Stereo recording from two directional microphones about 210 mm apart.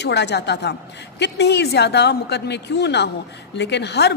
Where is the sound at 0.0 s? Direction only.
55° left (ahead or behind).